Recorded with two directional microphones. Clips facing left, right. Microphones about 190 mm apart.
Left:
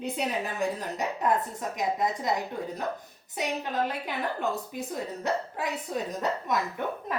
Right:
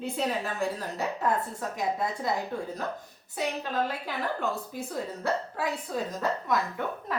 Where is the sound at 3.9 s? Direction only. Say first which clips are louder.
Even; 20° left (ahead or behind).